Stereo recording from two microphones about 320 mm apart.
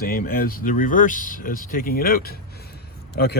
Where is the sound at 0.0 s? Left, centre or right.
Left.